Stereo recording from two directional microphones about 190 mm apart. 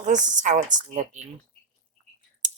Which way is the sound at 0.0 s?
40° right (ahead or behind).